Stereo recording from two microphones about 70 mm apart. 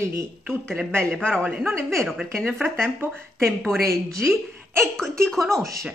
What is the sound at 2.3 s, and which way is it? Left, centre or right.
Speech, centre.